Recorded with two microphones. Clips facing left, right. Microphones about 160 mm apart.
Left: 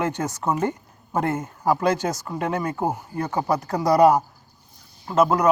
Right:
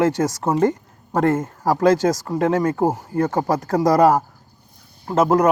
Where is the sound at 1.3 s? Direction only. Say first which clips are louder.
Right 2 dB; 45° right (ahead or behind).